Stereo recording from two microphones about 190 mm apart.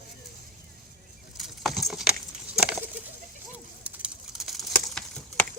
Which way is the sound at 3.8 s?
5° right (ahead or behind).